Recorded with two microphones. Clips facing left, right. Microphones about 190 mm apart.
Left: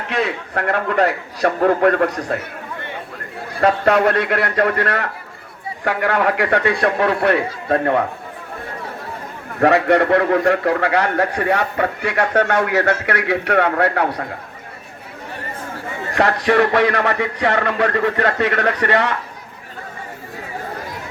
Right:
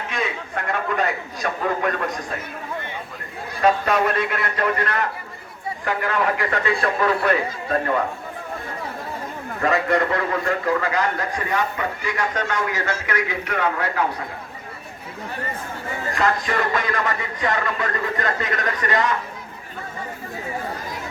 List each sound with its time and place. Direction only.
0.1 s a man's voice: 65° left (ahead or behind)
3.6 s a man's voice: 65° left (ahead or behind)
9.6 s a man's voice: 70° left (ahead or behind)
16.1 s a man's voice: 70° left (ahead or behind)